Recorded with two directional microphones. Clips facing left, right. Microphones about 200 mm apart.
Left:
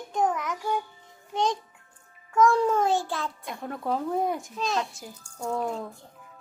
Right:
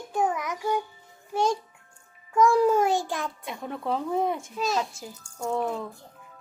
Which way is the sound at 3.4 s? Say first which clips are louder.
Left 1 dB; centre (ahead or behind).